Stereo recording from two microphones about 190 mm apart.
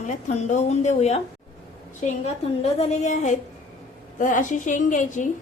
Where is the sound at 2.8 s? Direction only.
35° left (ahead or behind).